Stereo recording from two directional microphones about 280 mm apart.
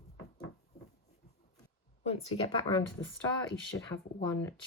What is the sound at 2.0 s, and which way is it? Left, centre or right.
Speech, centre.